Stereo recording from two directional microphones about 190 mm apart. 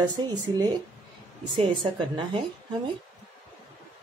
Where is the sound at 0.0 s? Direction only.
20° right (ahead or behind).